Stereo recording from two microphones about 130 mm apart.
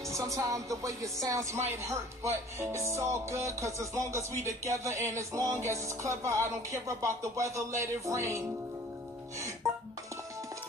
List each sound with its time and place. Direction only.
0.1 s speech: 25° right (ahead or behind)